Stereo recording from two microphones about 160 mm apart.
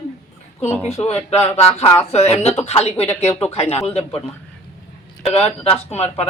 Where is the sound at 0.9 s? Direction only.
40° left (ahead or behind).